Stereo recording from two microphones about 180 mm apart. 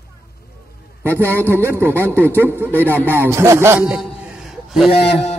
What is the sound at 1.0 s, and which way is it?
Speech, 10° right (ahead or behind).